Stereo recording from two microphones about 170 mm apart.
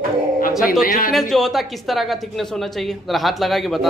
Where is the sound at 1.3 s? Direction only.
Centre (ahead or behind).